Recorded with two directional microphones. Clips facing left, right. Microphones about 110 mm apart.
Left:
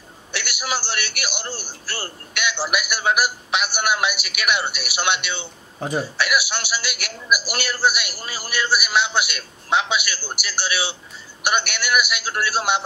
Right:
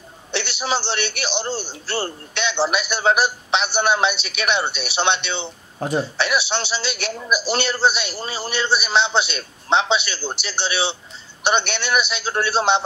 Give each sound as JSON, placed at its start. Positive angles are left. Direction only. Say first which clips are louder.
{"t": 0.3, "sound": "a man's voice", "louder": "right 4 dB", "side_deg": -25}
{"t": 5.8, "sound": "speech", "louder": "right 2 dB", "side_deg": 5}
{"t": 6.1, "sound": "a man's voice", "louder": "right 1 dB", "side_deg": -25}